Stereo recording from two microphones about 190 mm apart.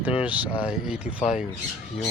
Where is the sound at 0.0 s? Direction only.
5° right (ahead or behind).